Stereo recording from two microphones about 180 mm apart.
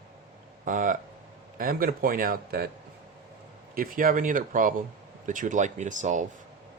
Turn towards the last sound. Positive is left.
turn(degrees=-45)  # may be behind; listen again after turning